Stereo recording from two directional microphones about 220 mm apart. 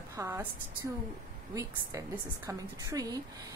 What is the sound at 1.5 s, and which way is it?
A woman's voice, 15° right (ahead or behind).